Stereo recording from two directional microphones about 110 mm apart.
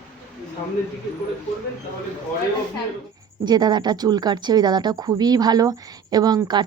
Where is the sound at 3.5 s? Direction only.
40° right (ahead or behind).